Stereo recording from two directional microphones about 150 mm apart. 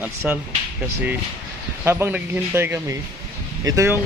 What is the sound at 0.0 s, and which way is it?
Speech, 10° right (ahead or behind).